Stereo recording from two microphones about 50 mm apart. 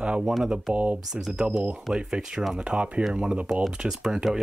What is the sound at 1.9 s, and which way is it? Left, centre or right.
Speech, centre.